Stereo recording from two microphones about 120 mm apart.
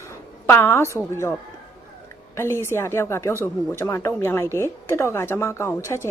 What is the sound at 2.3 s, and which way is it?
A woman's voice, 20° left (ahead or behind).